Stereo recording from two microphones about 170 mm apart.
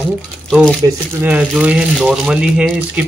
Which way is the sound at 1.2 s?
10° right (ahead or behind).